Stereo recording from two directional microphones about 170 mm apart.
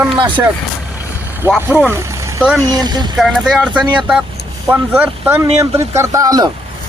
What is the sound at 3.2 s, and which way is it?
Speech, centre (ahead or behind).